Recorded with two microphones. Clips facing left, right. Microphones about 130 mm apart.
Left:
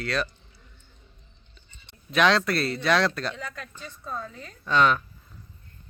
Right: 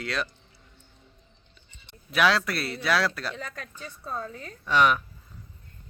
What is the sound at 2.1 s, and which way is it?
A man's voice, 10° right (ahead or behind).